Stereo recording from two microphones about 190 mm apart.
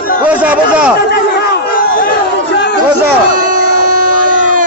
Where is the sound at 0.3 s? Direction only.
5° right (ahead or behind).